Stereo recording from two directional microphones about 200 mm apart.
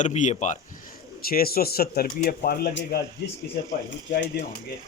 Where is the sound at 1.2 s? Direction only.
50° left (ahead or behind).